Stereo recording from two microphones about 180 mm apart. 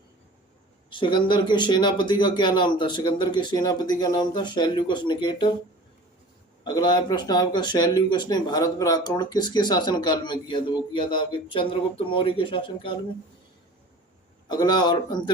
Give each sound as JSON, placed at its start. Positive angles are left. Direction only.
{"t": 0.9, "sound": "speech", "side_deg": 25}
{"t": 6.7, "sound": "speech", "side_deg": 25}
{"t": 14.4, "sound": "speech", "side_deg": 25}